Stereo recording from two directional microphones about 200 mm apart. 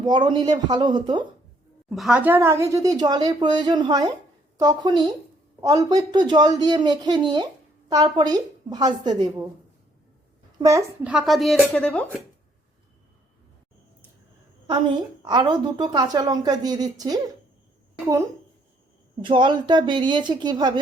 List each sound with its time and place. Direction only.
0.0 s speech: 20° right (ahead or behind)
2.0 s a woman's voice: 5° right (ahead or behind)
10.6 s a woman's voice: 15° right (ahead or behind)
11.1 s speech: centre (ahead or behind)
15.2 s speech: 20° right (ahead or behind)
19.2 s speech: 25° right (ahead or behind)